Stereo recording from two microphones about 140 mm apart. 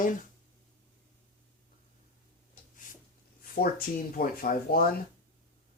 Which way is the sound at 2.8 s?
70° left (ahead or behind).